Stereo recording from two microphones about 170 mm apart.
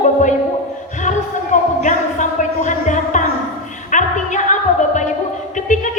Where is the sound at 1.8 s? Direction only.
45° left (ahead or behind).